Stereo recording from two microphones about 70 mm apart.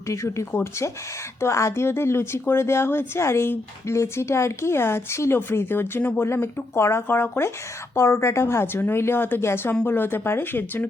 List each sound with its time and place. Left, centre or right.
0.1 s a woman's voice: left